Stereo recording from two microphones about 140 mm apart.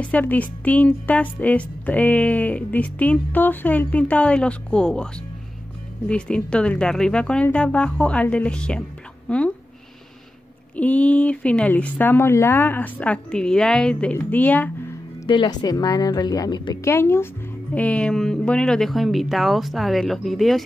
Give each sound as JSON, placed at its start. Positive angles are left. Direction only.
{"t": 0.0, "sound": "speech", "side_deg": 10}
{"t": 10.8, "sound": "speech", "side_deg": 10}
{"t": 15.2, "sound": "a woman's voice", "side_deg": 30}
{"t": 16.8, "sound": "speech", "side_deg": 20}